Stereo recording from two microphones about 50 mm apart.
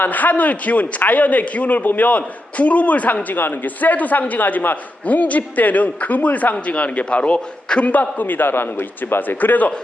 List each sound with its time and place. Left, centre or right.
0.0 s a man's voice: left
8.2 s a man's voice: left